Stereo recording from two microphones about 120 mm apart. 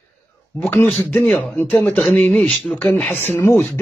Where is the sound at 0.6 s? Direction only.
15° left (ahead or behind).